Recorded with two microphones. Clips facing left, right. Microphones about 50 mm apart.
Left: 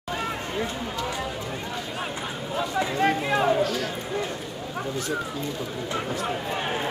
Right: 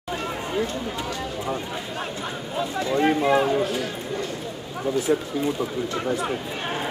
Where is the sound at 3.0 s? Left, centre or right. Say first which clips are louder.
Right 5 dB; centre.